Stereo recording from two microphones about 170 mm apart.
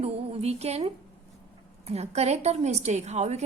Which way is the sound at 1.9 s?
40° right (ahead or behind).